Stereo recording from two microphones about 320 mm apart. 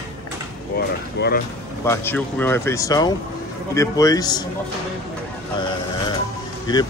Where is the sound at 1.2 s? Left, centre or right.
Left.